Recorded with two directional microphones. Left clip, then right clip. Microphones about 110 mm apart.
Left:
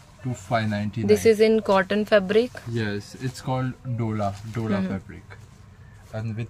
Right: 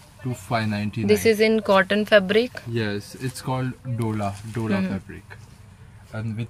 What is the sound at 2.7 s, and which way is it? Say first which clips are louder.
Speech: right 4 dB; 30° left (ahead or behind).